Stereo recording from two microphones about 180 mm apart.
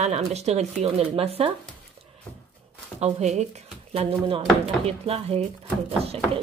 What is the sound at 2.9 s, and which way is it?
Speech, 35° right (ahead or behind).